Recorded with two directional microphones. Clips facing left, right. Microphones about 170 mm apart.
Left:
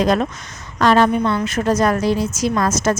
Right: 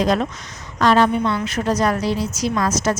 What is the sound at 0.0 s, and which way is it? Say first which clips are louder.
A woman's voice: left 2 dB; 55° left (ahead or behind).